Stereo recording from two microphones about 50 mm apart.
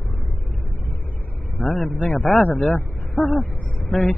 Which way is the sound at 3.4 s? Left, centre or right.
Left.